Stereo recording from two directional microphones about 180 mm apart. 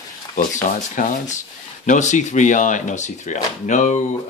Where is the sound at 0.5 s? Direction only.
45° left (ahead or behind).